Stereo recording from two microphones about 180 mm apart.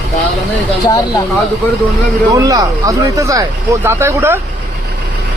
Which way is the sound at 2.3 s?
20° right (ahead or behind).